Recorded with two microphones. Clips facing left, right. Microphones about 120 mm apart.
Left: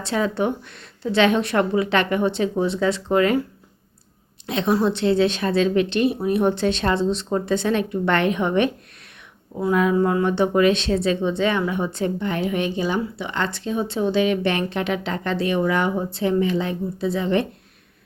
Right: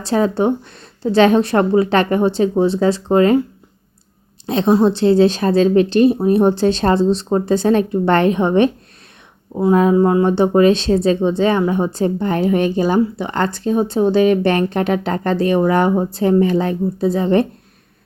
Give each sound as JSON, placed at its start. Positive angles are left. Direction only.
{"t": 0.0, "sound": "speech", "side_deg": -35}
{"t": 4.4, "sound": "speech", "side_deg": -35}